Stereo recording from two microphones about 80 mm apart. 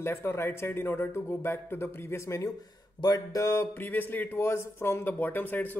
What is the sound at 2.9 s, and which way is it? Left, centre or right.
Speech, left.